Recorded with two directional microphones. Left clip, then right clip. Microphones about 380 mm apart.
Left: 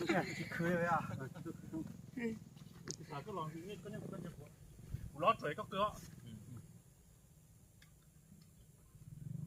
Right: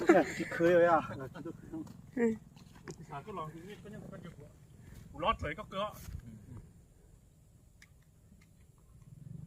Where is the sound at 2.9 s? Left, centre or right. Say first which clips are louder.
Right 2 dB; centre.